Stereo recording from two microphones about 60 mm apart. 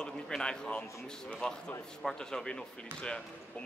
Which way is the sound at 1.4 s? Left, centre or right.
Centre.